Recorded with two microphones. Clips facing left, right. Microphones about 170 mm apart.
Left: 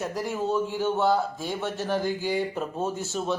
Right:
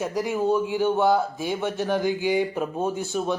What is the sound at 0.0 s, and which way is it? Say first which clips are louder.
Speech: right 4 dB; centre (ahead or behind).